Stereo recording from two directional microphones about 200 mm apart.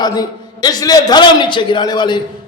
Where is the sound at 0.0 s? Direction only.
20° left (ahead or behind).